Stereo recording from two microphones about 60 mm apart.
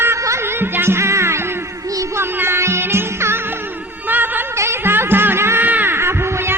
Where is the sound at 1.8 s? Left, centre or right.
Right.